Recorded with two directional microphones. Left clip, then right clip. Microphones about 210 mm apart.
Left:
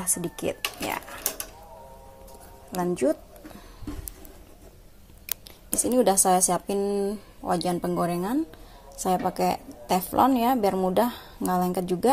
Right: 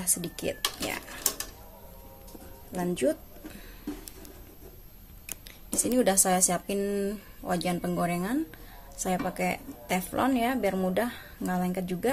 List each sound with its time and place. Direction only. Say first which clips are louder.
0.0 s speech: left 3 dB; 5° left (ahead or behind)
3.0 s speech: left 2 dB; 5° right (ahead or behind)
5.8 s a woman's voice: left 4 dB; 10° left (ahead or behind)